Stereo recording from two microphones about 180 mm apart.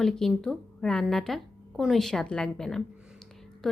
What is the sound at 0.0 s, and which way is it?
A woman's voice, centre (ahead or behind).